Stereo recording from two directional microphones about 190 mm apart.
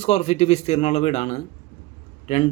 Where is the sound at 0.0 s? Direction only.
35° left (ahead or behind).